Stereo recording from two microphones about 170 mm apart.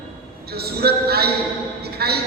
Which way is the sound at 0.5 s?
70° right (ahead or behind).